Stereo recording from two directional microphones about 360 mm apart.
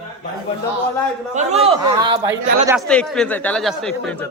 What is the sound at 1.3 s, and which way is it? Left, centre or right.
Speech, centre.